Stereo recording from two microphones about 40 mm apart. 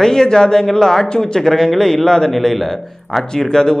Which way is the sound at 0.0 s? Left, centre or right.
Centre.